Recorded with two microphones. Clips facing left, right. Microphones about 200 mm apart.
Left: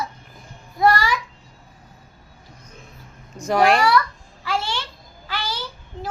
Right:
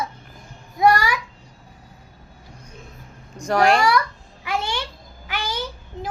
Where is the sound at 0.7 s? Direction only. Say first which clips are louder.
Right 1 dB; 15° right (ahead or behind).